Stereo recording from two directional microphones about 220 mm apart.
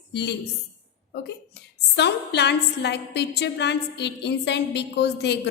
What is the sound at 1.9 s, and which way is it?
A woman's voice, 50° left (ahead or behind).